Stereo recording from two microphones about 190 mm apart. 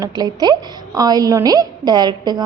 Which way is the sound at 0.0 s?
20° right (ahead or behind).